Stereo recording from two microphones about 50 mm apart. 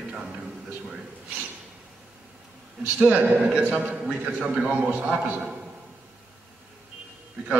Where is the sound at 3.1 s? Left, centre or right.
Right.